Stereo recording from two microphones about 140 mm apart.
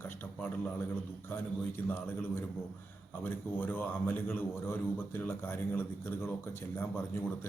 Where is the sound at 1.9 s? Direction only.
15° left (ahead or behind).